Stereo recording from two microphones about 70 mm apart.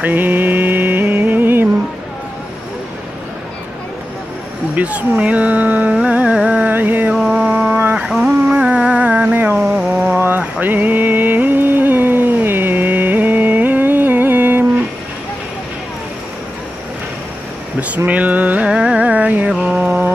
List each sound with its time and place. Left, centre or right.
0.0 s music: right
4.7 s speech: centre
5.9 s music: centre
6.6 s music: right
7.3 s mantra: centre
8.0 s a sound: centre
8.5 s music: centre
10.0 s a sound: right
17.7 s a sound: right
18.7 s music: centre
19.6 s mantra: centre